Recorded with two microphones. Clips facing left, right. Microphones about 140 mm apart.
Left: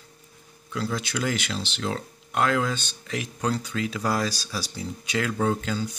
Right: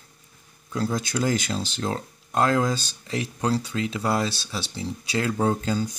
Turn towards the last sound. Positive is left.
turn(degrees=-40)  # may be behind; listen again after turning